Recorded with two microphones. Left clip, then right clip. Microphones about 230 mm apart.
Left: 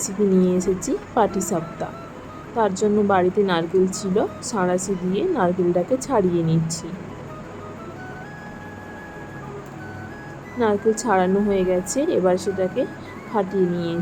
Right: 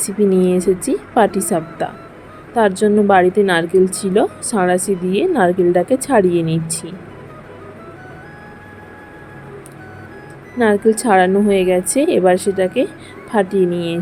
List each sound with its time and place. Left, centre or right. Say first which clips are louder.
0.0 s speech: right 5 dB; right
10.6 s speech: right 6 dB; right